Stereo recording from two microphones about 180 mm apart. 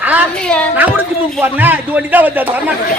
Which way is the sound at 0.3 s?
5° left (ahead or behind).